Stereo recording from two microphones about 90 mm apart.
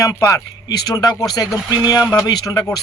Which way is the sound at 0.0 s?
35° left (ahead or behind).